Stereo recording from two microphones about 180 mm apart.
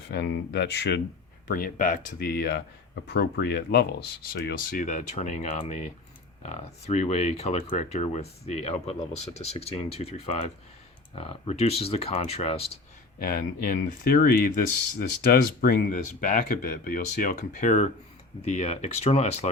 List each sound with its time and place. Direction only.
0.1 s speech: 65° left (ahead or behind)
1.5 s speech: 50° left (ahead or behind); by 12.7 s 35° left (ahead or behind)
13.1 s speech: 55° left (ahead or behind); by 19.5 s 35° left (ahead or behind)